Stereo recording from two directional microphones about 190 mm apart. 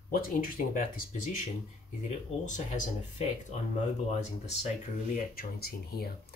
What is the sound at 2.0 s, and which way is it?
Speech, 40° left (ahead or behind).